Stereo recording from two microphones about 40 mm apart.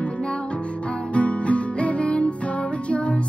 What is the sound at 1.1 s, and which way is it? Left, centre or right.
Music, left.